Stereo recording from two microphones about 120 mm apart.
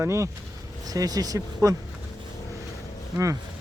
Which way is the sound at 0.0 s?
25° right (ahead or behind).